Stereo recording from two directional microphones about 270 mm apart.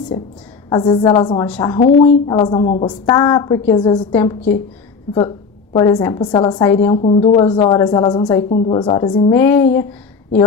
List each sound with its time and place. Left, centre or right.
0.7 s a woman's voice: centre
5.1 s a woman's voice: centre
7.0 s a woman's voice: left